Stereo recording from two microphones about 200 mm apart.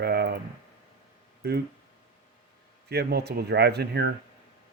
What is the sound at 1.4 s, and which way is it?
Speech, 50° right (ahead or behind).